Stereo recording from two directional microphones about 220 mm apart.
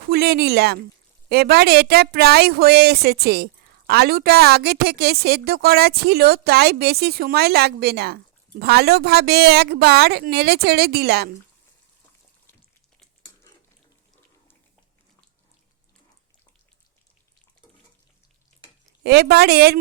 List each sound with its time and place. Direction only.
0.1 s a woman's voice: 45° right (ahead or behind)
19.0 s a woman's voice: 45° right (ahead or behind)